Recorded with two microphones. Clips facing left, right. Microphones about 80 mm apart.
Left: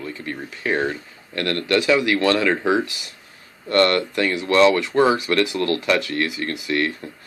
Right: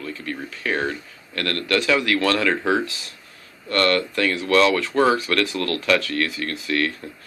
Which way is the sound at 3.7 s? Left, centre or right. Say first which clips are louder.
Left 3 dB; left.